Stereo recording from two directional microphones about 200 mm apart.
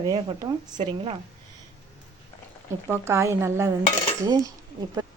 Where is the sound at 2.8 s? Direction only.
10° right (ahead or behind).